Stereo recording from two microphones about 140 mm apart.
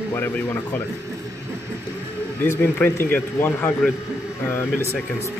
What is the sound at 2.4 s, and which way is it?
A man's voice, 15° left (ahead or behind).